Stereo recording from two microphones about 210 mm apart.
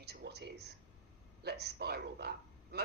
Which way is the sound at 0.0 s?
50° right (ahead or behind).